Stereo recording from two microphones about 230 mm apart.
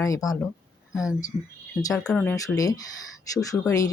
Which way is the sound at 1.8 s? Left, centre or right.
Centre.